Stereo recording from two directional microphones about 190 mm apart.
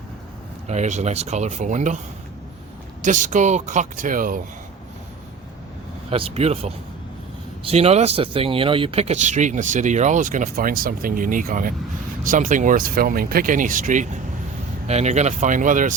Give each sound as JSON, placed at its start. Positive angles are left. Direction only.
{"t": 0.7, "sound": "speech", "side_deg": -35}
{"t": 3.0, "sound": "speech", "side_deg": -40}
{"t": 6.1, "sound": "speech", "side_deg": -30}